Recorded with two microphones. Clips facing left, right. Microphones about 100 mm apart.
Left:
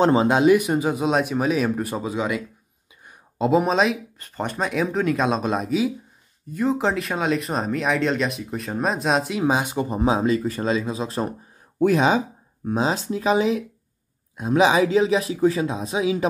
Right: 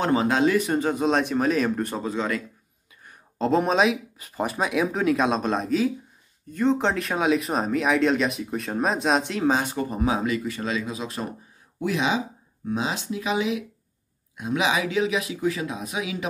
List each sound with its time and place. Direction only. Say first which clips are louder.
0.0 s speech: left 4 dB; 25° left (ahead or behind)
11.8 s speech: left 6 dB; 45° left (ahead or behind); by 16.3 s 30° left (ahead or behind)